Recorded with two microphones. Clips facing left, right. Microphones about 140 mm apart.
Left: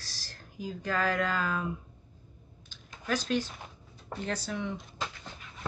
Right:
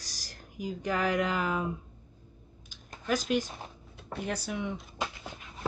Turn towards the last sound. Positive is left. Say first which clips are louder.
# right 3 dB
turn(degrees=-15)  # may be behind; listen again after turning